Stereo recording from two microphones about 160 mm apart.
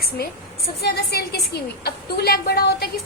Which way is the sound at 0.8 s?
85° left.